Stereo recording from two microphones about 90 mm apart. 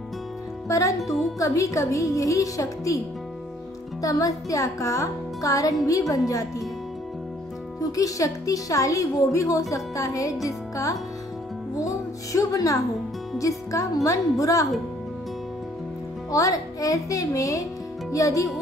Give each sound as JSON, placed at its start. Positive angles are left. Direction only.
{"t": 0.7, "sound": "music", "side_deg": 35}
{"t": 4.0, "sound": "music", "side_deg": 40}
{"t": 7.9, "sound": "music", "side_deg": 40}
{"t": 11.8, "sound": "speech", "side_deg": 40}
{"t": 13.4, "sound": "music", "side_deg": 35}
{"t": 16.3, "sound": "music", "side_deg": 40}